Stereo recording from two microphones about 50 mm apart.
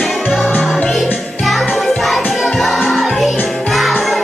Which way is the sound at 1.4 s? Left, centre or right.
Centre.